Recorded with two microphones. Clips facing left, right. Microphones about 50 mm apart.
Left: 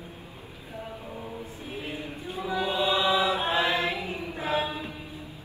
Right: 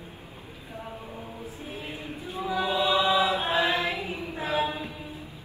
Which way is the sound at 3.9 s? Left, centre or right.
Left.